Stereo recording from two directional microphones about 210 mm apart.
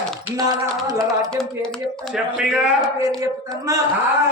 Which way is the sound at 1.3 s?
5° left (ahead or behind).